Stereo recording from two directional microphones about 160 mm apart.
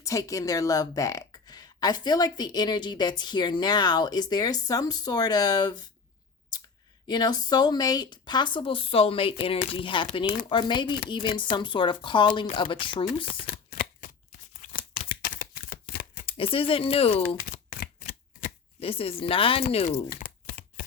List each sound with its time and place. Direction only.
0.0 s a woman's voice: 20° left (ahead or behind)
7.1 s a woman's voice: 25° left (ahead or behind)
14.6 s shuffling cards: 55° left (ahead or behind)
16.2 s speech: 35° left (ahead or behind)
17.2 s a sound: 60° left (ahead or behind)
18.8 s speech: 35° left (ahead or behind)
20.1 s chopping: 55° left (ahead or behind)